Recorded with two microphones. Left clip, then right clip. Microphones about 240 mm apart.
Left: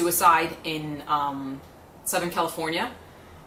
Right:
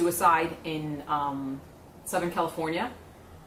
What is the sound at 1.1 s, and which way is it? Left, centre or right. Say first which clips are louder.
A woman's voice: left 4 dB; right.